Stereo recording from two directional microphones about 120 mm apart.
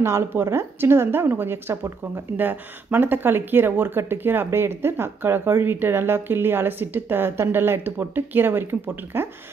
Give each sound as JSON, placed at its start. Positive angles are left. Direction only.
{"t": 0.0, "sound": "speech", "side_deg": -20}